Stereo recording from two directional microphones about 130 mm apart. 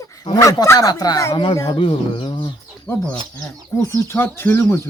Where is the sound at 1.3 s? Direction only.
40° left (ahead or behind).